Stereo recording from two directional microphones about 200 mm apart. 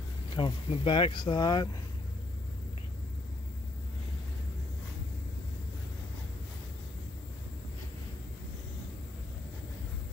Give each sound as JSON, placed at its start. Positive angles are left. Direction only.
{"t": 0.4, "sound": "speech", "side_deg": 25}